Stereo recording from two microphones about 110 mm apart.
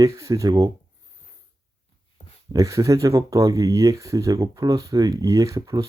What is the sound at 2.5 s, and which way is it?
Speech, 30° right (ahead or behind).